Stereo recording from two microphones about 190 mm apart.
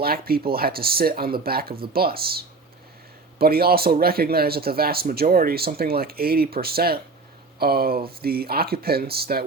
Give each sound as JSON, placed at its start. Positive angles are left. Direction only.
{"t": 0.0, "sound": "speech", "side_deg": -50}
{"t": 3.3, "sound": "speech", "side_deg": -55}